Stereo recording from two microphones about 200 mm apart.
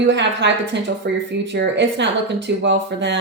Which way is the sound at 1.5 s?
60° right (ahead or behind).